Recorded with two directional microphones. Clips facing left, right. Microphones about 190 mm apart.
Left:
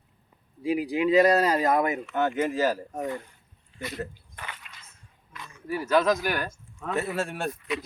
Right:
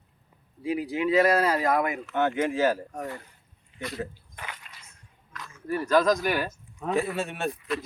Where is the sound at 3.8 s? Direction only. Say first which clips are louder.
Right 1 dB; centre (ahead or behind).